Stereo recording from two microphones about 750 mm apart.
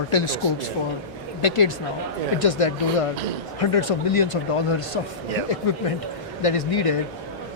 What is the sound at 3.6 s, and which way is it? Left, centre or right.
Speech, left.